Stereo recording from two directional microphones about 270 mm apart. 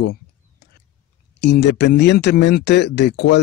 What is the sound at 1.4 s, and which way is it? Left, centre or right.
Speech, left.